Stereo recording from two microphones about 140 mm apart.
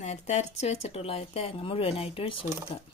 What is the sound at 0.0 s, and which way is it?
Speech, 55° left (ahead or behind).